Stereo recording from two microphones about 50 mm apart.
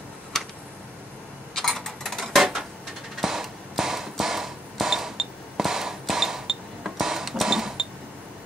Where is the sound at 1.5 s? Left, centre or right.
Centre.